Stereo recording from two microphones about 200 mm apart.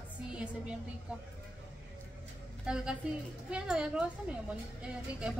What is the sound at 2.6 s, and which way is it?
A woman's voice, 5° right (ahead or behind).